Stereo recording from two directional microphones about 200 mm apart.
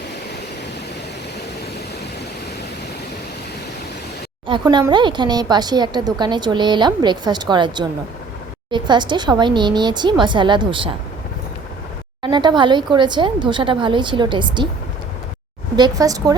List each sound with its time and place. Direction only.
4.4 s speech: 25° right (ahead or behind)
12.2 s speech: 20° right (ahead or behind)
15.7 s speech: 20° right (ahead or behind)